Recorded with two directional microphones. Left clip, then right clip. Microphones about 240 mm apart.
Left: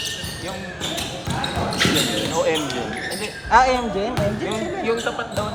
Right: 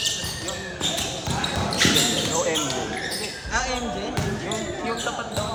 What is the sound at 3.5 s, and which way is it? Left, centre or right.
Speech, left.